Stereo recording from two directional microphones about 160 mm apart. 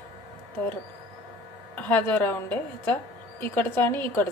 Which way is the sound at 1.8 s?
10° left (ahead or behind).